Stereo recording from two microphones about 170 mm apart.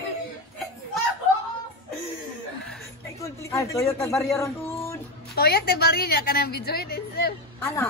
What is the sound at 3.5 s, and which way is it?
Speech, 20° left (ahead or behind).